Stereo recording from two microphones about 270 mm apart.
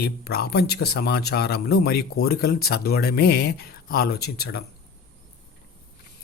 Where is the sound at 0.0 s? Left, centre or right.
Left.